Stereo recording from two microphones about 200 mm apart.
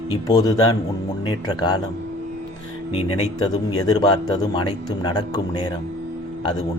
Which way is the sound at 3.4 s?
20° left (ahead or behind).